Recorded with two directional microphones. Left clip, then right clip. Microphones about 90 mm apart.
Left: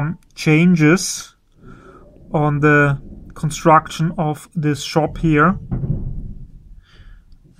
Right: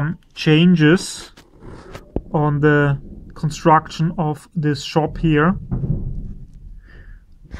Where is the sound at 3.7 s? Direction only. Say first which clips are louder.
Left 2 dB; 20° left (ahead or behind).